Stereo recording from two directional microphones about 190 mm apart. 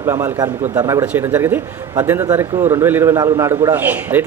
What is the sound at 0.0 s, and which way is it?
A man's voice, 15° right (ahead or behind).